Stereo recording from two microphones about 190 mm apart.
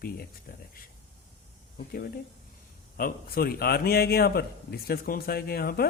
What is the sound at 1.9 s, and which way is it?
A man's voice, 50° left (ahead or behind).